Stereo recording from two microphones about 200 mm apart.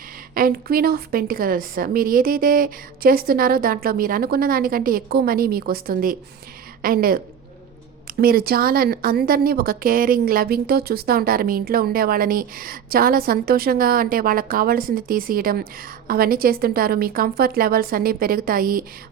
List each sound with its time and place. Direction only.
0.3 s speech: 45° right (ahead or behind)